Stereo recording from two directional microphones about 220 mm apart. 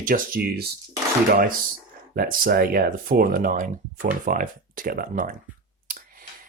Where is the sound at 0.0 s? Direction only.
40° right (ahead or behind).